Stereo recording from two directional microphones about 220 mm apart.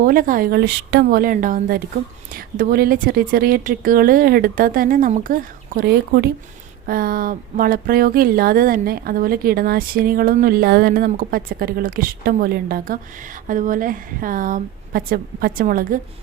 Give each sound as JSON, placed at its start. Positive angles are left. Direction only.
{"t": 0.0, "sound": "speech", "side_deg": -40}